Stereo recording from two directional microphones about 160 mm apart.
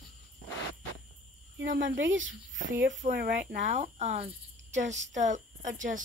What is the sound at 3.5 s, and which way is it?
A woman's voice, 50° right (ahead or behind).